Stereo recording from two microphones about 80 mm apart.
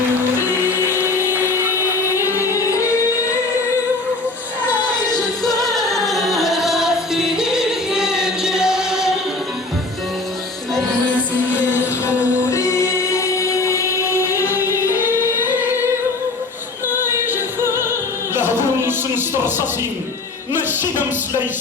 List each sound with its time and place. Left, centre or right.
0.3 s music: right
2.0 s music: left
5.5 s music: centre
12.0 s music: left
17.0 s music: right
18.3 s a sound: right